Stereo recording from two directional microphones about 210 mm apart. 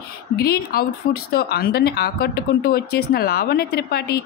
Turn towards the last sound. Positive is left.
turn(degrees=50)  # may be behind; listen again after turning